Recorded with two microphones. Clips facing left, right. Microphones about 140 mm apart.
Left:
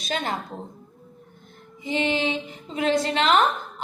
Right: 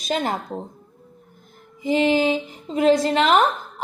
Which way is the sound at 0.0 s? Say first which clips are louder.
Right 4 dB; 35° right (ahead or behind).